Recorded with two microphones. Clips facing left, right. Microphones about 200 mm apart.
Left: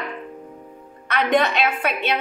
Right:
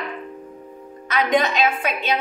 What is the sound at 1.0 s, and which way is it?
Speech, 65° left (ahead or behind).